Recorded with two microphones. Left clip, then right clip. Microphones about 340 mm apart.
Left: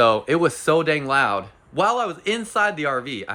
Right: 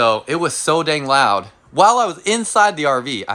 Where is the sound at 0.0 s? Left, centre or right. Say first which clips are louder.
Right 1 dB; centre.